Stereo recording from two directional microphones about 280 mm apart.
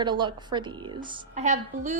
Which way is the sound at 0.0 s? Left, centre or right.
Centre.